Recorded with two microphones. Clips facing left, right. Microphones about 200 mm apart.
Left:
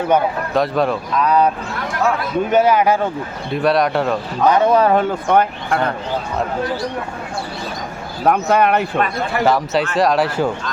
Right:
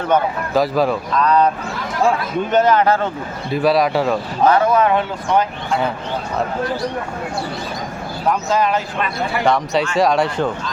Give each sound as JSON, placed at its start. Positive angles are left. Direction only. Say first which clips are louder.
{"t": 0.5, "sound": "speech", "louder": "right 2 dB", "side_deg": 0}
{"t": 2.5, "sound": "a man's voice", "louder": "even", "side_deg": 10}
{"t": 3.5, "sound": "speech", "louder": "right 1 dB", "side_deg": 0}
{"t": 4.4, "sound": "speech", "louder": "even", "side_deg": 20}
{"t": 4.7, "sound": "speech", "louder": "left 2 dB", "side_deg": 35}
{"t": 5.3, "sound": "speech", "louder": "left 1 dB", "side_deg": 60}
{"t": 8.3, "sound": "speech", "louder": "left 3 dB", "side_deg": 60}
{"t": 9.4, "sound": "speech", "louder": "left 1 dB", "side_deg": 5}